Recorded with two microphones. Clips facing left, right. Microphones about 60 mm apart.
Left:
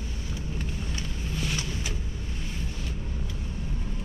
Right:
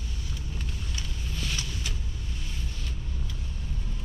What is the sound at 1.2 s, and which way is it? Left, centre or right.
Vehicle, centre.